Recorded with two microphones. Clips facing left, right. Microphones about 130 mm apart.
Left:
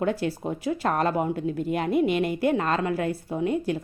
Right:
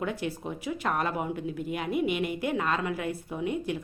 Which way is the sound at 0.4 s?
35° left (ahead or behind).